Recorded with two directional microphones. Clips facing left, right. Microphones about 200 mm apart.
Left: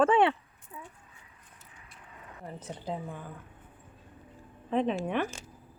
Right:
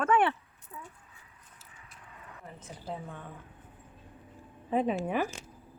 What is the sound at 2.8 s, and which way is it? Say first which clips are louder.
Speech: left 3 dB; 15° left (ahead or behind).